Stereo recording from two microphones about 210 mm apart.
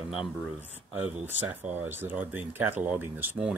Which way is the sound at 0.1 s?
5° right (ahead or behind).